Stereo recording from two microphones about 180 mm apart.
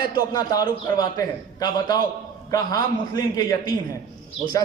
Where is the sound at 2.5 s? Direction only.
20° left (ahead or behind).